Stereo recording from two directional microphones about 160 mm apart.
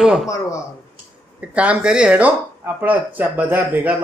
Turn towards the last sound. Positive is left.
turn(degrees=-10)  # may be behind; listen again after turning